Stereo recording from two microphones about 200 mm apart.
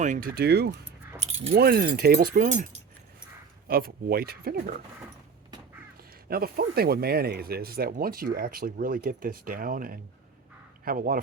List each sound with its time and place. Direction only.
0.0 s speech: 45° right (ahead or behind)
1.2 s speech: 30° right (ahead or behind)
1.5 s speech: 50° right (ahead or behind)
3.7 s speech: 50° right (ahead or behind)
6.0 s speech: 50° right (ahead or behind)